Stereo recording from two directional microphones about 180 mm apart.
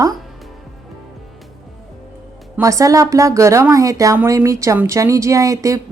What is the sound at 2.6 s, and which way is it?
Speech, 20° right (ahead or behind).